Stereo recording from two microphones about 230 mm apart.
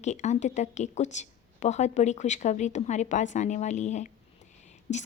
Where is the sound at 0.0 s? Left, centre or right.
Left.